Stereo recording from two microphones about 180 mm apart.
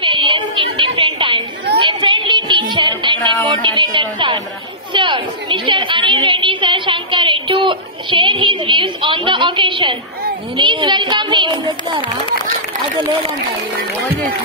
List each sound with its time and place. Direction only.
0.0 s music: 25° right (ahead or behind)
0.9 s a sound: 25° right (ahead or behind)
10.6 s a child's voice: 25° right (ahead or behind)